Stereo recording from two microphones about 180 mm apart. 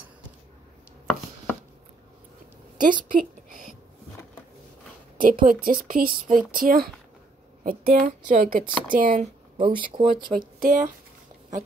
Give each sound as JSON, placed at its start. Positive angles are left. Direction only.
{"t": 2.8, "sound": "a sound", "side_deg": -50}
{"t": 5.1, "sound": "speech", "side_deg": -50}
{"t": 9.6, "sound": "speech", "side_deg": -30}
{"t": 10.4, "sound": "speech", "side_deg": -50}